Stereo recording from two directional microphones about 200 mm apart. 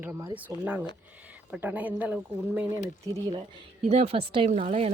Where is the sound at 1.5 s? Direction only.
10° right (ahead or behind).